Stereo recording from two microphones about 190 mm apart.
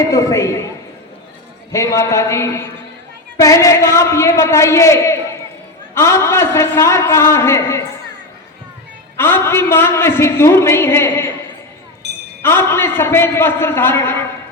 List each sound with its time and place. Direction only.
0.1 s a man's voice: 15° left (ahead or behind)
1.7 s a man's voice: 15° left (ahead or behind)
9.1 s a man's voice: 10° left (ahead or behind)
12.0 s a sound: 60° right (ahead or behind)
12.4 s a man's voice: 10° left (ahead or behind)